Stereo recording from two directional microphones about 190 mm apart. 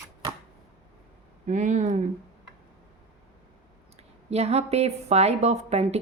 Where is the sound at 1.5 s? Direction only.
40° right (ahead or behind).